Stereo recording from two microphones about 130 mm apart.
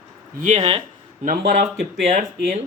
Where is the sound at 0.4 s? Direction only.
60° right (ahead or behind).